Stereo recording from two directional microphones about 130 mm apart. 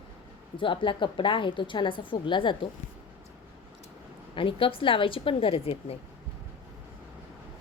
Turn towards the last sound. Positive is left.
turn(degrees=50)  # may be behind; listen again after turning